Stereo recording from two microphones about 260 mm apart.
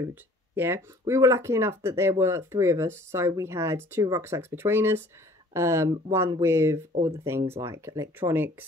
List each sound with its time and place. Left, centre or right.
0.1 s speech: centre